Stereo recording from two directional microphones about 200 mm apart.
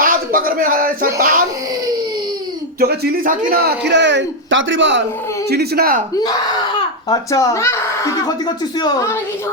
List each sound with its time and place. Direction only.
0.0 s a sound: 45° right (ahead or behind)
2.8 s a man's voice: 50° right (ahead or behind)
5.5 s speech: 50° right (ahead or behind)
7.1 s speech: 15° left (ahead or behind)